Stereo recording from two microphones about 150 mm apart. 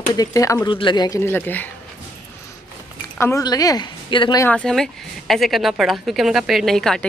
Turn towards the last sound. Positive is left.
turn(degrees=5)  # may be behind; listen again after turning